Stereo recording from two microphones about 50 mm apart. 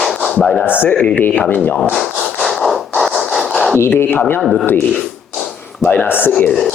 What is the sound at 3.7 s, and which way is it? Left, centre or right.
Speech, left.